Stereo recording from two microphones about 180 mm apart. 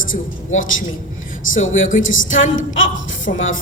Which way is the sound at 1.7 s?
45° left (ahead or behind).